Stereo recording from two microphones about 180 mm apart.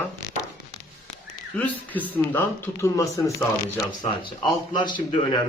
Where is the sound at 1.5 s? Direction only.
10° left (ahead or behind).